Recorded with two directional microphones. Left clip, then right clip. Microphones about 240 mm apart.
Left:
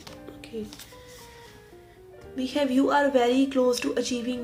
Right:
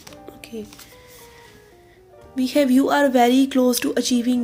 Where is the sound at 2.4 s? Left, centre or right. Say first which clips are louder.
Right 7 dB; right.